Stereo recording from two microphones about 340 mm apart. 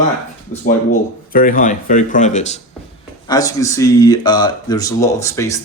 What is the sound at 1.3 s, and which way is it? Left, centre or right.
Speech, left.